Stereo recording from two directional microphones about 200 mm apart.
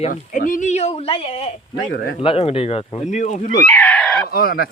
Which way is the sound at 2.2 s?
30° left (ahead or behind).